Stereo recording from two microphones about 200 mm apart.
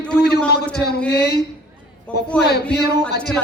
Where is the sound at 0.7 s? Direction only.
55° left (ahead or behind).